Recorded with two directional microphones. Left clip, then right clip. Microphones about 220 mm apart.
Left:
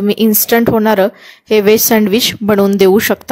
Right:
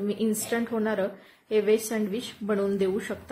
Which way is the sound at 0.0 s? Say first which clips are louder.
Left 15 dB; 45° left (ahead or behind).